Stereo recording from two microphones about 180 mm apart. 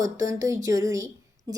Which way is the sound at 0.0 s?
20° right (ahead or behind).